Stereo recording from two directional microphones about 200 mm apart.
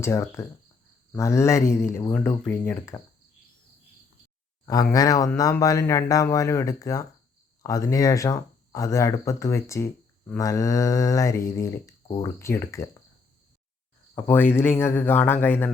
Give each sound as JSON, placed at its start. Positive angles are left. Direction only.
{"t": 0.0, "sound": "speech", "side_deg": 15}
{"t": 4.6, "sound": "speech", "side_deg": 20}
{"t": 14.2, "sound": "speech", "side_deg": 10}